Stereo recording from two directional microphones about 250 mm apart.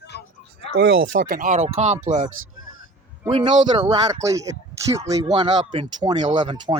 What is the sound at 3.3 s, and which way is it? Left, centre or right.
Speech, centre.